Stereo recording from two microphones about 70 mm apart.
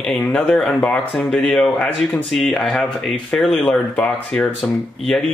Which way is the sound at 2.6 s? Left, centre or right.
Centre.